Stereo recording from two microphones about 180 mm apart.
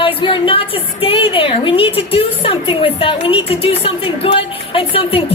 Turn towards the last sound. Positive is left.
turn(degrees=30)  # may be behind; listen again after turning